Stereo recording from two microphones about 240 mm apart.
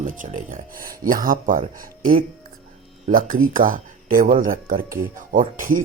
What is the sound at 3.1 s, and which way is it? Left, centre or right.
Speech, right.